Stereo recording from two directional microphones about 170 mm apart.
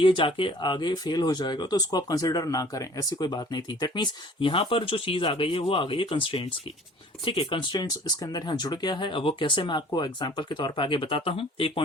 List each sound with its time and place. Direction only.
0.0 s speech: 30° left (ahead or behind)